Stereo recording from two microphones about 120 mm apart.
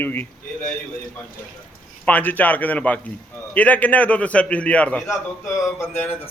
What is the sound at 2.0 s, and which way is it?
A man's voice, 15° left (ahead or behind).